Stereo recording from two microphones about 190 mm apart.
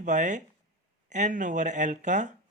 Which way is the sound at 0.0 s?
40° right (ahead or behind).